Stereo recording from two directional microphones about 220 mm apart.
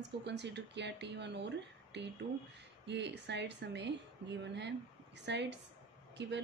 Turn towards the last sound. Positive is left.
turn(degrees=-50)  # may be behind; listen again after turning